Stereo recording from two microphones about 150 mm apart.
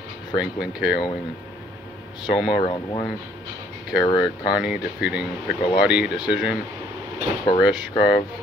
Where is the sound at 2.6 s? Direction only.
30° left (ahead or behind).